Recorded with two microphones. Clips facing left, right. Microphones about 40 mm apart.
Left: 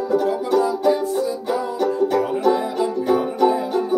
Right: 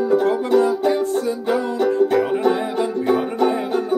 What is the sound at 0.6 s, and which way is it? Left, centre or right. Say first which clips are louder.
Music: left 1 dB; right.